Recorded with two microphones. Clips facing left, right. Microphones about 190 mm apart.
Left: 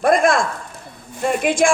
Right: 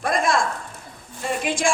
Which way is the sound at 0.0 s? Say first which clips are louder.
Left 7 dB; 55° left (ahead or behind).